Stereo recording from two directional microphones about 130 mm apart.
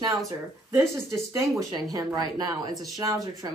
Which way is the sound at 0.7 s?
20° right (ahead or behind).